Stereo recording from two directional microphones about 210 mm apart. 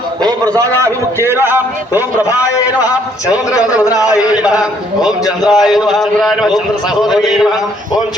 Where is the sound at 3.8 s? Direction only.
15° left (ahead or behind).